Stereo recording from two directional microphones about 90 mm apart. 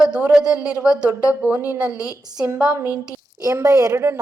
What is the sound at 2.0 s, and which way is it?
Speech, 10° right (ahead or behind).